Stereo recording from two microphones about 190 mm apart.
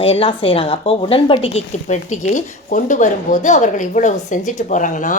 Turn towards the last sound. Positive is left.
turn(degrees=40)  # may be behind; listen again after turning